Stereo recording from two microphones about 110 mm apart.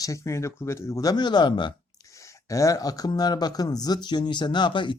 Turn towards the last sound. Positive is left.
turn(degrees=45)  # may be behind; listen again after turning